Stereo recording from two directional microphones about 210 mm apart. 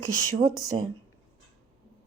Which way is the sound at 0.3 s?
90° right.